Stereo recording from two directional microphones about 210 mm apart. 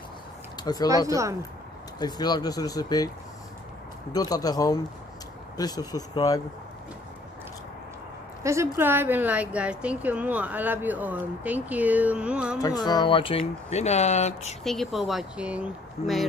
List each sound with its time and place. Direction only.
0.8 s speech: 15° right (ahead or behind)
2.0 s speech: 20° left (ahead or behind)
4.1 s speech: 15° left (ahead or behind)
8.5 s speech: 10° right (ahead or behind)
12.6 s speech: 20° left (ahead or behind)
14.6 s speech: centre (ahead or behind)